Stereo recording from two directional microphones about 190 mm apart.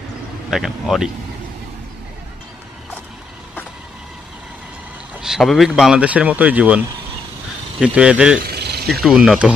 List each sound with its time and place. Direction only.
0.5 s speech: centre (ahead or behind)
5.1 s speech: 5° right (ahead or behind)
7.8 s speech: 5° right (ahead or behind)
8.5 s a sound: 60° right (ahead or behind)
9.0 s speech: centre (ahead or behind)